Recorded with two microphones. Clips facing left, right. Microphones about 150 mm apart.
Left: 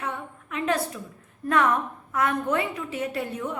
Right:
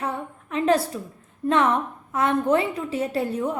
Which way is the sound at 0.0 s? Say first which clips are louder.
Right 4 dB; 35° right (ahead or behind).